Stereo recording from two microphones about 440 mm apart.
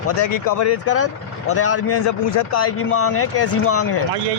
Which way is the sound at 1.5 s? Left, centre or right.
Left.